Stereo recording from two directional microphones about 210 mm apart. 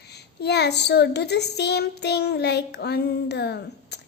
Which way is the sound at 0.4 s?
50° left (ahead or behind).